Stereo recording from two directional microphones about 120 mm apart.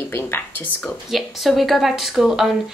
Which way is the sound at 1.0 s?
Centre (ahead or behind).